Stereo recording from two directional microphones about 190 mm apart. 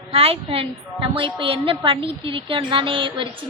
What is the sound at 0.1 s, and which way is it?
A woman's voice, 30° right (ahead or behind).